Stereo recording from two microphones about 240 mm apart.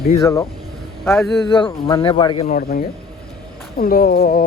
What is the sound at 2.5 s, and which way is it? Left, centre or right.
Speech, left.